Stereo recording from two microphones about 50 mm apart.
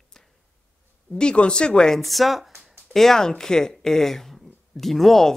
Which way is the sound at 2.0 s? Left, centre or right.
Centre.